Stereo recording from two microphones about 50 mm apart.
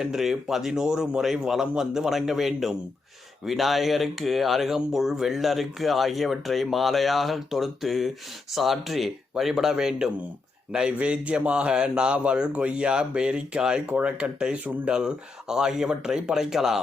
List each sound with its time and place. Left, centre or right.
0.0 s speech: centre